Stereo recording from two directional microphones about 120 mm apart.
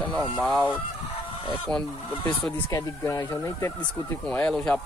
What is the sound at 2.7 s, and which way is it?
Speech, 25° left (ahead or behind).